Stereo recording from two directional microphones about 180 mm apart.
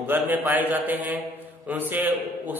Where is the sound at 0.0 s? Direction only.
10° right (ahead or behind).